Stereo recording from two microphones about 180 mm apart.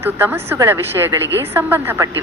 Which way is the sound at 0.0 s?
10° right (ahead or behind).